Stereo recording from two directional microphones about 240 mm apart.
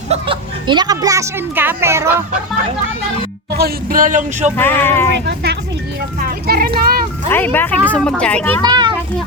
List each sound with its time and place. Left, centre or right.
0.1 s a woman's voice: right
3.5 s speech: right
4.5 s speech: centre
6.2 s a sound: right
7.3 s a child's voice: centre
8.6 s a child's voice: centre